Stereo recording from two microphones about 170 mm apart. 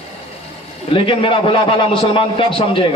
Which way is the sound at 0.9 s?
30° left (ahead or behind).